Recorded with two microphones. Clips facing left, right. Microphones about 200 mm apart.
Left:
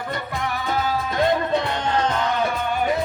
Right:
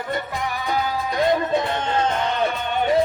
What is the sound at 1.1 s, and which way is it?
Music, 20° right (ahead or behind).